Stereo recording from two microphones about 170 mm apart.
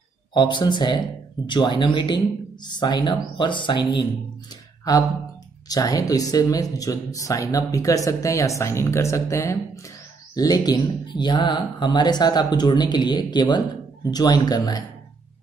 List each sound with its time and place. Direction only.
0.3 s speech: 25° left (ahead or behind)
5.7 s speech: 20° left (ahead or behind)